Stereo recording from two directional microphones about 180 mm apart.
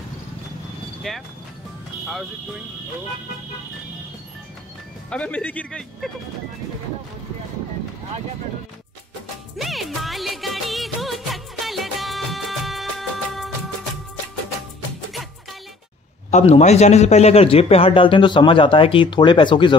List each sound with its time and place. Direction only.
1.1 s speech: centre (ahead or behind)
5.1 s speech: 5° left (ahead or behind)
9.6 s music of bollywood: centre (ahead or behind)
16.3 s a man's voice: 40° left (ahead or behind)